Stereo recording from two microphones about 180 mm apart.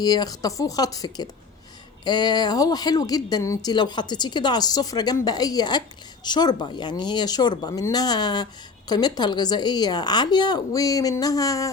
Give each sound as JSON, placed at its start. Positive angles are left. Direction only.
{"t": 0.0, "sound": "speech", "side_deg": 20}